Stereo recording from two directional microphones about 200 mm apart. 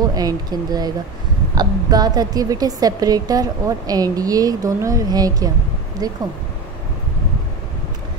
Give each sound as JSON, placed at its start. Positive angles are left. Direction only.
{"t": 0.0, "sound": "speech", "side_deg": -20}